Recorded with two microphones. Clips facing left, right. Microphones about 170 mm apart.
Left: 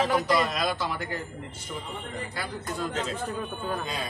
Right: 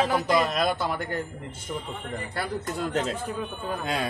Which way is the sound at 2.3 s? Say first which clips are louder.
Right 6 dB; 65° right (ahead or behind).